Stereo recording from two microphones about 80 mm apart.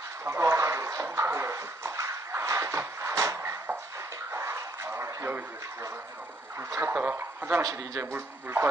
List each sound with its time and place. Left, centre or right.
0.2 s speech: right
4.3 s a sound: right
6.9 s a man's voice: right
7.6 s a man's voice: right
8.1 s a man's voice: right